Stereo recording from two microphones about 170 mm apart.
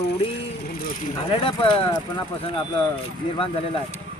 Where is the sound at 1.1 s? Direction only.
30° left (ahead or behind).